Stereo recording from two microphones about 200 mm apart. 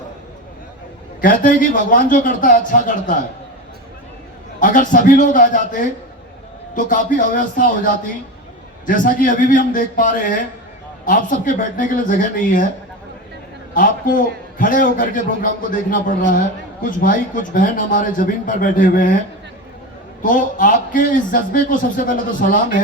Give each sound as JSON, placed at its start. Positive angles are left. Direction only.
{"t": 1.2, "sound": "a man's voice", "side_deg": 45}
{"t": 4.6, "sound": "a man's voice", "side_deg": 40}
{"t": 13.7, "sound": "a man's voice", "side_deg": 45}
{"t": 20.2, "sound": "a man's voice", "side_deg": 40}